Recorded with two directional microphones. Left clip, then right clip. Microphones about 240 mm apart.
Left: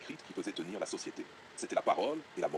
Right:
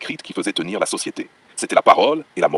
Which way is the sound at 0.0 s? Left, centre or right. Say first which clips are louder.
Right 17 dB; right.